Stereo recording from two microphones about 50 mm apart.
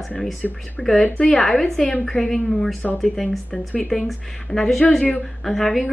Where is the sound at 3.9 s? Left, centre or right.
Centre.